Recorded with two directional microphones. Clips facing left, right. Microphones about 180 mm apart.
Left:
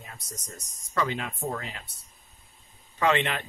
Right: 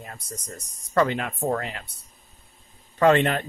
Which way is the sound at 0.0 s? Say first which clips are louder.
Right 6 dB; 55° right (ahead or behind).